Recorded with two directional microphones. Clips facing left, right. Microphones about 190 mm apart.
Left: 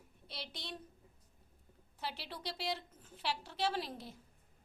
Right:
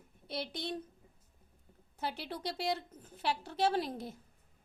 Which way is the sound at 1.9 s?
50° right (ahead or behind).